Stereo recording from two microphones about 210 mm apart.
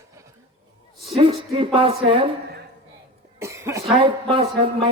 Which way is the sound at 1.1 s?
25° right (ahead or behind).